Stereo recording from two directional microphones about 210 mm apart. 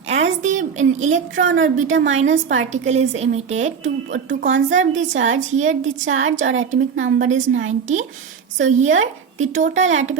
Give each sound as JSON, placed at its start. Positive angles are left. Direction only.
{"t": 0.1, "sound": "a sound", "side_deg": -35}
{"t": 2.0, "sound": "speech", "side_deg": -35}
{"t": 6.4, "sound": "a woman's voice", "side_deg": -70}
{"t": 7.2, "sound": "speech", "side_deg": -35}